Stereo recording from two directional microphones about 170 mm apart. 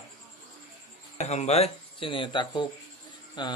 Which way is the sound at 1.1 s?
40° left (ahead or behind).